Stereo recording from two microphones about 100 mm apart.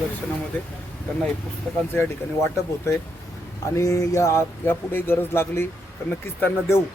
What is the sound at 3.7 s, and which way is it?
Speech, 35° left (ahead or behind).